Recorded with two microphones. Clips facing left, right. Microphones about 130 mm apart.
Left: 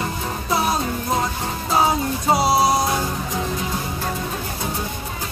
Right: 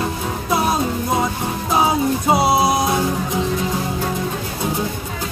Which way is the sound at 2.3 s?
20° right (ahead or behind).